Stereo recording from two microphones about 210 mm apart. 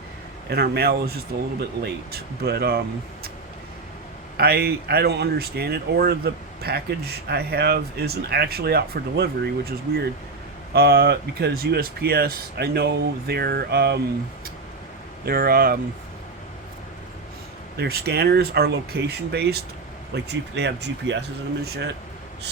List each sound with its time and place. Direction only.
0.5 s speech: 50° right (ahead or behind)
4.4 s speech: 50° right (ahead or behind)
15.2 s speech: 45° right (ahead or behind)
17.7 s speech: 50° right (ahead or behind)